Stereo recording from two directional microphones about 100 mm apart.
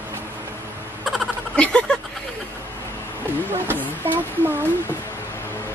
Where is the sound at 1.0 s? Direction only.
Centre (ahead or behind).